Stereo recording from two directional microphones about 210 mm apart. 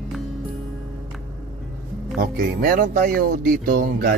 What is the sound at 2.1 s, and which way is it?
Speech, 40° right (ahead or behind).